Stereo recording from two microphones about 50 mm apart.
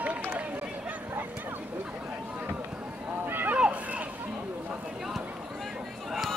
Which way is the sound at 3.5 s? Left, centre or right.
Right.